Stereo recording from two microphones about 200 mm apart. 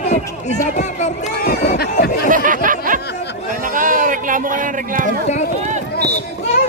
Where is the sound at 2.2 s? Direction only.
40° right (ahead or behind).